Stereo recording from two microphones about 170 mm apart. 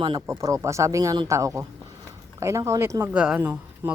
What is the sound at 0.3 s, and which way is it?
Speech, 20° right (ahead or behind).